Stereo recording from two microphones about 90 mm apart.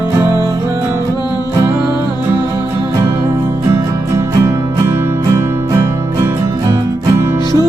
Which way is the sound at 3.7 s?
30° right (ahead or behind).